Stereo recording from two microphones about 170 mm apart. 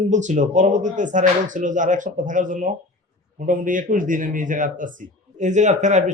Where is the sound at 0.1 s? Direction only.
45° right (ahead or behind).